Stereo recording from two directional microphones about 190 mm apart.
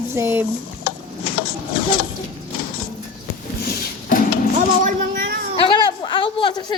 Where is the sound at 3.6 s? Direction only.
50° left (ahead or behind).